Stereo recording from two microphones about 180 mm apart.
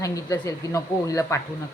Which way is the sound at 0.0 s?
15° left (ahead or behind).